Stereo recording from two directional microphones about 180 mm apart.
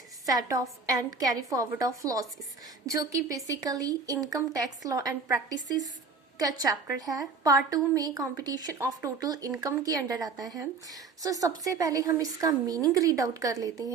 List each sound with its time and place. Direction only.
0.3 s speech: 20° right (ahead or behind)